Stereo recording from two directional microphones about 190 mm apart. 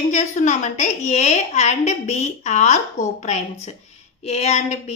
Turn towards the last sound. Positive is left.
turn(degrees=35)  # may be behind; listen again after turning